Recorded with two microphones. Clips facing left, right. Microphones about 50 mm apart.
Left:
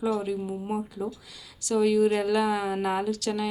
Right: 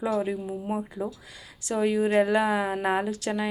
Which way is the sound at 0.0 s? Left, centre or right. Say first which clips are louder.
Right 1 dB; right.